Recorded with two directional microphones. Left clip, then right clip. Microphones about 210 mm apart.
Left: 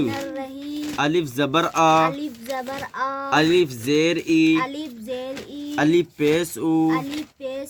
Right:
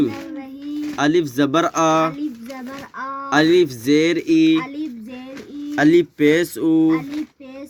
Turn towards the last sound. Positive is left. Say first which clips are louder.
# right 4 dB
turn(degrees=-20)  # may be behind; listen again after turning